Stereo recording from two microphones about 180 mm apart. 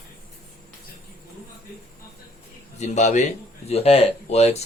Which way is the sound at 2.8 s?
40° left (ahead or behind).